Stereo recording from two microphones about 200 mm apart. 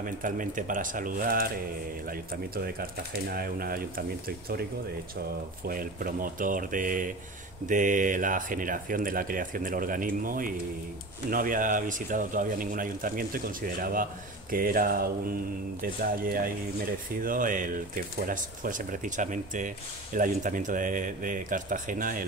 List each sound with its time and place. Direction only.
0.0 s speech: 40° right (ahead or behind)
2.5 s speech: 50° right (ahead or behind)
5.7 s speech: 45° right (ahead or behind)